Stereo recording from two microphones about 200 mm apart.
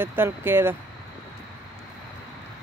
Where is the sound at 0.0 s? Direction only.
10° right (ahead or behind).